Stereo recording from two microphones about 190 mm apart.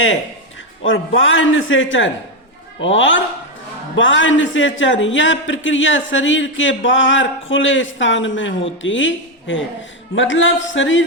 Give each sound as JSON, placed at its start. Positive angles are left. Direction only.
{"t": 0.9, "sound": "a man's voice", "side_deg": 90}